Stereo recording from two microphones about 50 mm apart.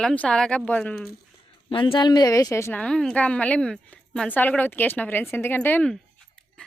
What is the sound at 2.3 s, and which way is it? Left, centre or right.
Speech, left.